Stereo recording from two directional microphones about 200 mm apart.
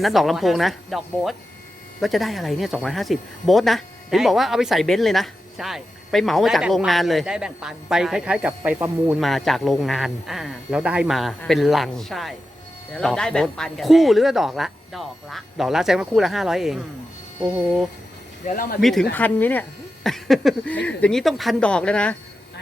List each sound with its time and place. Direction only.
0.0 s speech: centre (ahead or behind)
18.4 s speech: 45° left (ahead or behind)
18.8 s speech: centre (ahead or behind)